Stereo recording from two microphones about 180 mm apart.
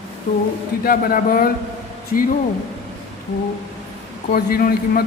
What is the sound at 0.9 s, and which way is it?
Speech, 50° left (ahead or behind).